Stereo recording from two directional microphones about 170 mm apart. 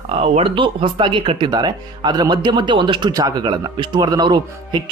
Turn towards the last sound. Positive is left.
turn(degrees=-25)  # may be behind; listen again after turning